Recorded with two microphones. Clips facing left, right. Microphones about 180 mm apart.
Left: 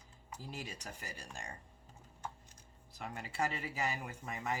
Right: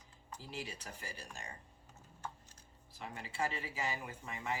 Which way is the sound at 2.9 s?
45° left (ahead or behind).